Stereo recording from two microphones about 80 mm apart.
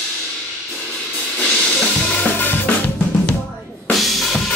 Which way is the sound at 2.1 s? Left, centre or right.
Left.